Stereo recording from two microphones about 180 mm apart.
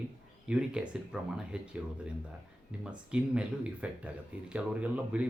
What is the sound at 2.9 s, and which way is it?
Speech, 5° right (ahead or behind).